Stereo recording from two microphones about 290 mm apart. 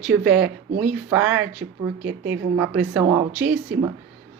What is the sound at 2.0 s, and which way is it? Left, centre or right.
Speech, right.